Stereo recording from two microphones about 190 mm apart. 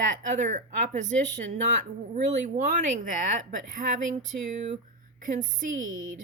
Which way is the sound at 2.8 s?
40° right (ahead or behind).